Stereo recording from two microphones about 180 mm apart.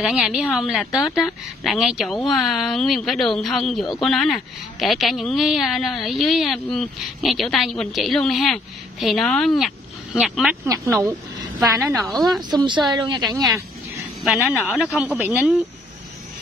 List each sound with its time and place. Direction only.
0.0 s a woman's voice: 5° right (ahead or behind)
10.6 s a woman's voice: 15° right (ahead or behind)
12.0 s a woman's voice: centre (ahead or behind)
12.4 s a woman's voice: 25° right (ahead or behind)
14.2 s a woman's voice: centre (ahead or behind)